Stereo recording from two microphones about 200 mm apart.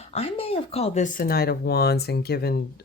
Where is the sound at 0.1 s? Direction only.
30° left (ahead or behind).